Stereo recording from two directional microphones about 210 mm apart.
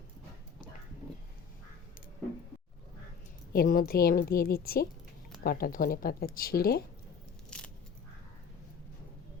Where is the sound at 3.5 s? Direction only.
45° left (ahead or behind).